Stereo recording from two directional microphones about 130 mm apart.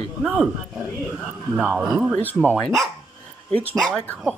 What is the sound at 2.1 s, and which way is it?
Speech, 15° left (ahead or behind).